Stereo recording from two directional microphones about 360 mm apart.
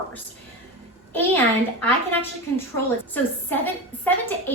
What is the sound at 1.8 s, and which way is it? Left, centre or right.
Speech, centre.